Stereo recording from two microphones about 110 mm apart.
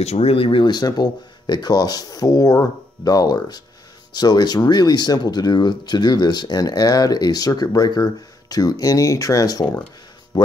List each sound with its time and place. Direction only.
0.0 s speech: 75° left (ahead or behind); by 10.5 s 40° left (ahead or behind)